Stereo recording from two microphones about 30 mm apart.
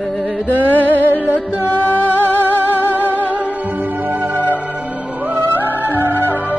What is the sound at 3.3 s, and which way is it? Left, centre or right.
Music, right.